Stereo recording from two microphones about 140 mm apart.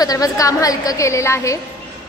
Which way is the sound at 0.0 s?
25° left (ahead or behind).